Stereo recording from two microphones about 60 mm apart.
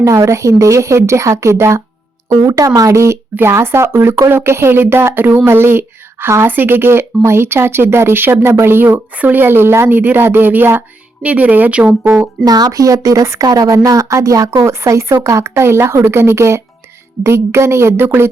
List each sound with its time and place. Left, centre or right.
0.0 s a woman's voice: right
2.3 s a woman's voice: right
2.9 s a woman's voice: right
9.1 s speech: right
11.2 s speech: right
12.5 s speech: right
13.4 s a woman's voice: right